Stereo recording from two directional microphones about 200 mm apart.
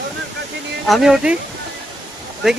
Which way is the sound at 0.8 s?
Centre (ahead or behind).